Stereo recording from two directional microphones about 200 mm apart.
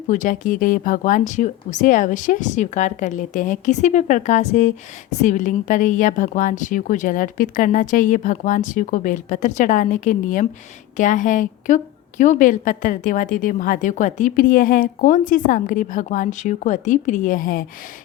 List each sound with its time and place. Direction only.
0.1 s a woman's voice: 40° left (ahead or behind)